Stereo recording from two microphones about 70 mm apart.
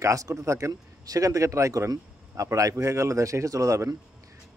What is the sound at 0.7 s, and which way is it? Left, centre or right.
Speech, right.